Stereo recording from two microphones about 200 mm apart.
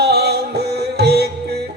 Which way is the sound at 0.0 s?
55° right (ahead or behind).